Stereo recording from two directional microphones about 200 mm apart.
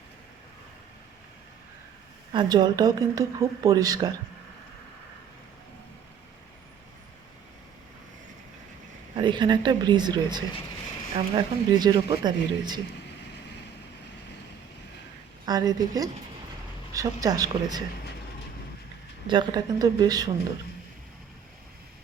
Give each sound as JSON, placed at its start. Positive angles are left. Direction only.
{"t": 2.3, "sound": "speech", "side_deg": -20}
{"t": 9.1, "sound": "speech", "side_deg": -25}
{"t": 15.4, "sound": "speech", "side_deg": -20}
{"t": 19.3, "sound": "speech", "side_deg": -20}